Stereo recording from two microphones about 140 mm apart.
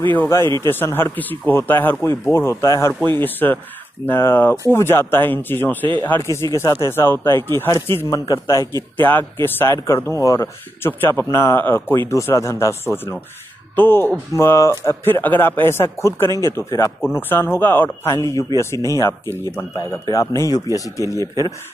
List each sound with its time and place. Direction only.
0.1 s speech: 15° left (ahead or behind)